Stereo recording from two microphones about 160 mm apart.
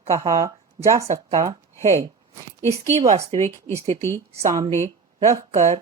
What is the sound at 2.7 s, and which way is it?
Speech, 45° right (ahead or behind).